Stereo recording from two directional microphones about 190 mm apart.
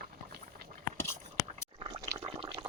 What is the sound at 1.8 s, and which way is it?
Fill, 20° right (ahead or behind).